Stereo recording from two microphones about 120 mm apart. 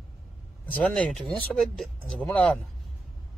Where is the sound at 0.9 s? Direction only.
5° left (ahead or behind).